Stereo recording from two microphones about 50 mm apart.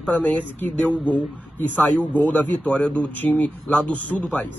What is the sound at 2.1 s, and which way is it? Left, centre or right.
Speech, left.